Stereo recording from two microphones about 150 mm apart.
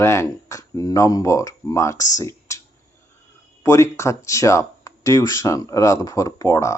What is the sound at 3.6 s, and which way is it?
Speech, 20° left (ahead or behind).